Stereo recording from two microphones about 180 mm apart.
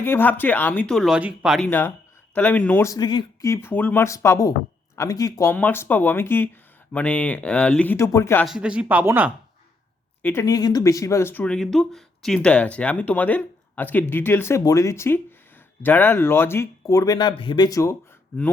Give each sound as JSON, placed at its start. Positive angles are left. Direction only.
{"t": 0.0, "sound": "speech", "side_deg": 10}
{"t": 1.6, "sound": "speech", "side_deg": 10}
{"t": 8.4, "sound": "speech", "side_deg": -5}
{"t": 10.2, "sound": "speech", "side_deg": 15}